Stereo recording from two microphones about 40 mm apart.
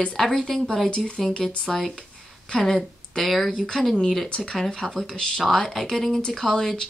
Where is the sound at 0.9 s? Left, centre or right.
Left.